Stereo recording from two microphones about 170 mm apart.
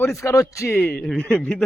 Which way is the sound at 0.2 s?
20° left (ahead or behind).